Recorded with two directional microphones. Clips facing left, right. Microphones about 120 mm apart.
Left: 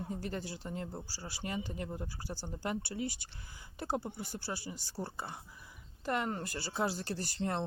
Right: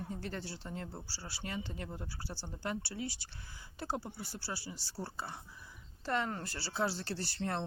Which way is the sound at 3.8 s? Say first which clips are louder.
Left 3 dB; 20° left (ahead or behind).